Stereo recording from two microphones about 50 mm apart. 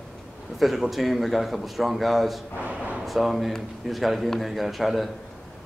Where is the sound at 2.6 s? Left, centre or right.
Right.